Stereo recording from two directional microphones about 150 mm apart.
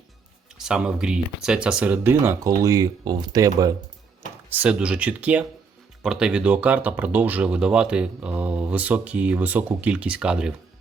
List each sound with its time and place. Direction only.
0.6 s speech: 5° right (ahead or behind); by 3.8 s 25° right (ahead or behind)
4.5 s speech: 10° right (ahead or behind)